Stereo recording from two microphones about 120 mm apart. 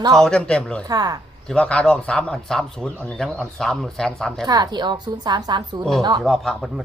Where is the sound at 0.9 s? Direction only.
35° right (ahead or behind).